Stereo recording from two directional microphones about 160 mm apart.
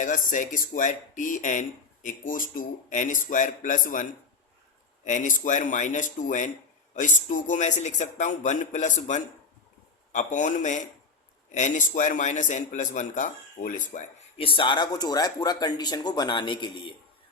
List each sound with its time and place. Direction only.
0.0 s speech: 55° left (ahead or behind)
5.0 s speech: 50° left (ahead or behind)
14.3 s speech: 35° left (ahead or behind)